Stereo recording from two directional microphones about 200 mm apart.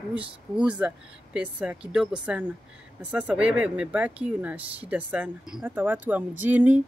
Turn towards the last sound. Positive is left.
turn(degrees=-10)  # may be behind; listen again after turning